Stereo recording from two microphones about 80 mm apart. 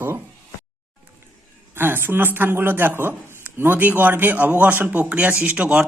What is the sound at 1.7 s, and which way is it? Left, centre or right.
Speech, right.